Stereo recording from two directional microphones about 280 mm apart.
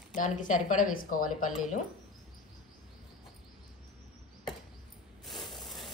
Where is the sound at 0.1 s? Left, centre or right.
Left.